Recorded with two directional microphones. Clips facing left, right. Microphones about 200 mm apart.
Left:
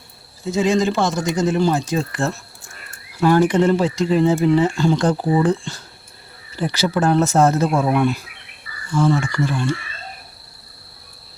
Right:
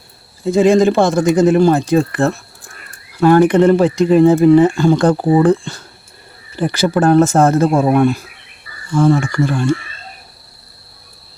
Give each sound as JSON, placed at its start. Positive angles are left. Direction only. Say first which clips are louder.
{"t": 0.4, "sound": "speech", "louder": "right 7 dB", "side_deg": -55}